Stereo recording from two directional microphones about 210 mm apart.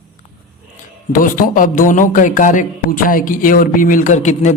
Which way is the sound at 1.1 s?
40° left (ahead or behind).